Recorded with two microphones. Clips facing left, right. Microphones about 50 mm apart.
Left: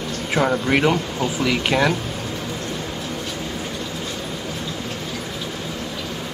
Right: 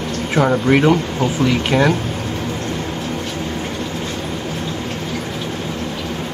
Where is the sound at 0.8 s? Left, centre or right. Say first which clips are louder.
Right 4 dB; right.